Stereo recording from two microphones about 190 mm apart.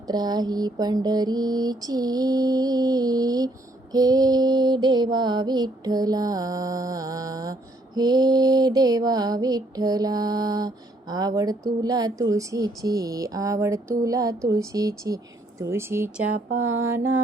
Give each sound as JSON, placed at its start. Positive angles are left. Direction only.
{"t": 0.1, "sound": "mantra", "side_deg": -20}
{"t": 11.8, "sound": "a woman's voice", "side_deg": -20}